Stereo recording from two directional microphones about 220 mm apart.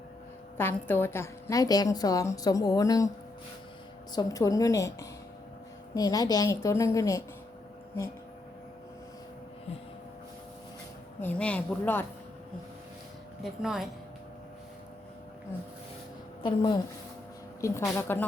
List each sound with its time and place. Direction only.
0.9 s a woman's voice: 10° left (ahead or behind)
4.1 s a woman's voice: 15° left (ahead or behind)
11.2 s a woman's voice: 5° left (ahead or behind)
13.4 s a woman's voice: centre (ahead or behind)
16.4 s a woman's voice: 20° left (ahead or behind)